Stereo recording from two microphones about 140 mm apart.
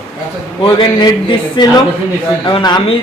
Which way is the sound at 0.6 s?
35° left (ahead or behind).